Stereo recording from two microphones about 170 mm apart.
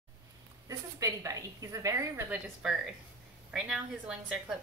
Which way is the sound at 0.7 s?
20° right (ahead or behind).